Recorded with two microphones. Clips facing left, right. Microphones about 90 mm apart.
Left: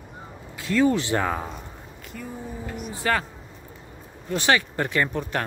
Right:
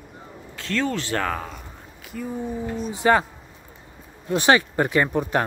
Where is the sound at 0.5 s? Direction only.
10° left (ahead or behind).